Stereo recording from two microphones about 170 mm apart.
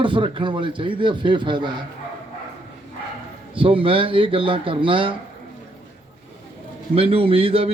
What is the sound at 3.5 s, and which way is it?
Speech, 30° right (ahead or behind).